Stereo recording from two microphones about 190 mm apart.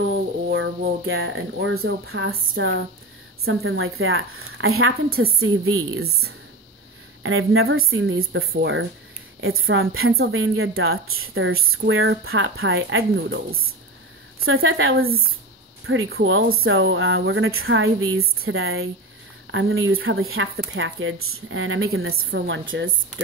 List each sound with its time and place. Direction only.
1.0 s a woman's voice: 90° right
7.2 s a woman's voice: 90° right
14.4 s a woman's voice: 90° right